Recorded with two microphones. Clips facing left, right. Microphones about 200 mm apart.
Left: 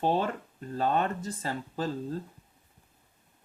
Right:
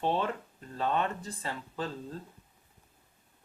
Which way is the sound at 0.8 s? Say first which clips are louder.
Left 3 dB; 40° left (ahead or behind).